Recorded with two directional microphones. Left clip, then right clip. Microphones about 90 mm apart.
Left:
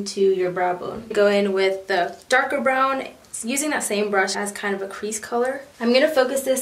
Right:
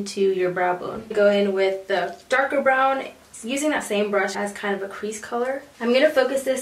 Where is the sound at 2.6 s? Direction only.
35° left (ahead or behind).